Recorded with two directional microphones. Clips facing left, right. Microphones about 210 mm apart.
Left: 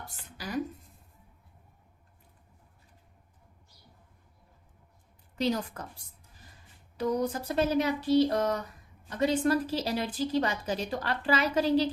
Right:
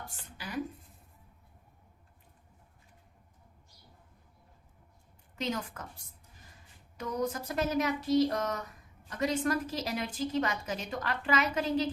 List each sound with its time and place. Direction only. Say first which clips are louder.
5.4 s a woman's voice: left 6 dB; 35° left (ahead or behind)
6.9 s a woman's voice: left 5 dB; 35° left (ahead or behind)